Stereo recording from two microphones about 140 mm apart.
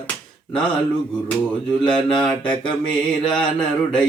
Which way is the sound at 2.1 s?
5° left (ahead or behind).